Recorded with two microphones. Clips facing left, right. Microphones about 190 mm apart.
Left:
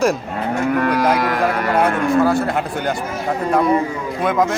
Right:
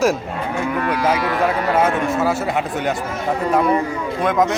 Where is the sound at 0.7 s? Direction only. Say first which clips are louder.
Left 5 dB; 45° left (ahead or behind).